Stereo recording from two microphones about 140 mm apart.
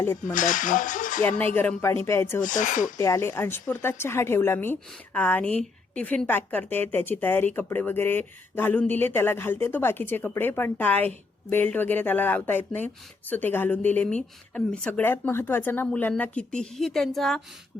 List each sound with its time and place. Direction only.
0.0 s a woman's voice: 15° left (ahead or behind)
0.3 s speech: 65° left (ahead or behind)
1.2 s a woman's voice: 10° left (ahead or behind)
2.4 s speech: 65° left (ahead or behind)
3.0 s a woman's voice: 20° left (ahead or behind); by 17.4 s 5° left (ahead or behind)